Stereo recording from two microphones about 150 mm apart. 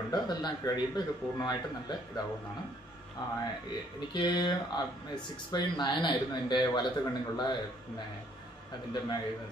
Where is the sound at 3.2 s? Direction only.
25° left (ahead or behind).